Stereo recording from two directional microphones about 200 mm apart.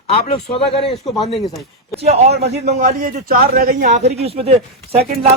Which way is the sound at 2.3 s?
55° right (ahead or behind).